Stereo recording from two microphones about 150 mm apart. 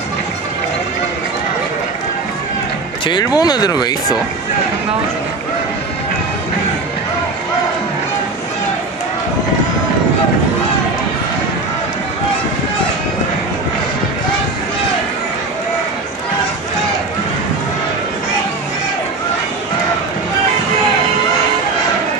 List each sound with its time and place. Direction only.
3.1 s speech: 25° left (ahead or behind)